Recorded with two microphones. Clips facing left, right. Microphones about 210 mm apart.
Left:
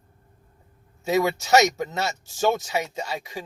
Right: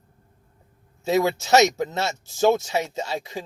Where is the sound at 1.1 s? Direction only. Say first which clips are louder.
Right 1 dB; 25° right (ahead or behind).